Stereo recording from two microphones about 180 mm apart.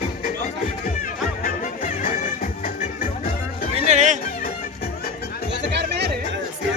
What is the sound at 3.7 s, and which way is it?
Music, 40° right (ahead or behind).